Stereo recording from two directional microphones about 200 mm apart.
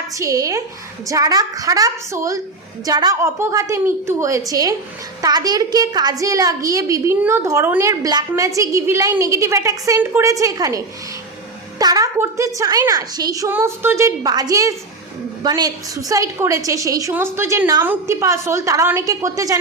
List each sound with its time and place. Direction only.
0.1 s a woman's voice: 15° right (ahead or behind)